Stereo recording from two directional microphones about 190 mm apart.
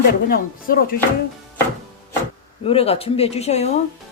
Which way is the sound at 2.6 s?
30° left (ahead or behind).